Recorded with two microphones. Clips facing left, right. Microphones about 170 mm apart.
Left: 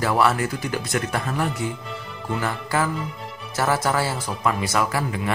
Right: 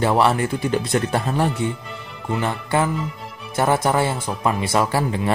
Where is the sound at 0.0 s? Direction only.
25° right (ahead or behind).